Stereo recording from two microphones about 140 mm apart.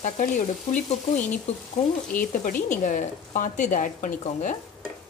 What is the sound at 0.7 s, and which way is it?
A woman's voice, 65° left (ahead or behind).